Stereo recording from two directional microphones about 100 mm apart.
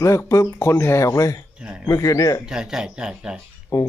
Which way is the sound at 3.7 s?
40° left (ahead or behind).